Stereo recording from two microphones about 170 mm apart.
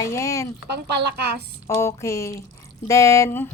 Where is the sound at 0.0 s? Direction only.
15° left (ahead or behind).